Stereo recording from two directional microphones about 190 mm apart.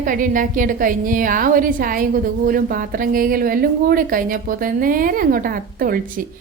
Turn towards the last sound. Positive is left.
turn(degrees=-50)  # may be behind; listen again after turning